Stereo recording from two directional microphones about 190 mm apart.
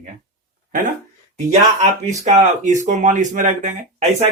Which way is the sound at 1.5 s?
35° right (ahead or behind).